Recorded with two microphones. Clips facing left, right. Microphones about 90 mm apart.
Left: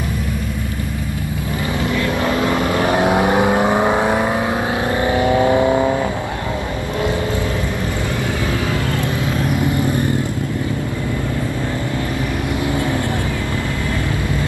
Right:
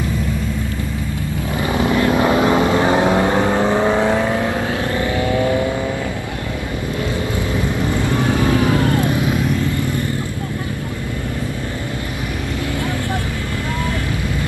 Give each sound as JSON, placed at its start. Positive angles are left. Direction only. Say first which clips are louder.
{"t": 1.8, "sound": "vehicle", "louder": "right 5 dB", "side_deg": -25}
{"t": 3.0, "sound": "vehicle", "louder": "even", "side_deg": 15}
{"t": 5.0, "sound": "vehicle", "louder": "left 4 dB", "side_deg": 25}
{"t": 8.5, "sound": "vehicle", "louder": "right 5 dB", "side_deg": -20}
{"t": 9.6, "sound": "vehicle", "louder": "left 2 dB", "side_deg": 20}